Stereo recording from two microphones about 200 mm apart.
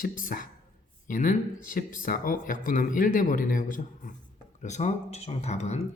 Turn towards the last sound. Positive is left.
turn(degrees=35)  # may be behind; listen again after turning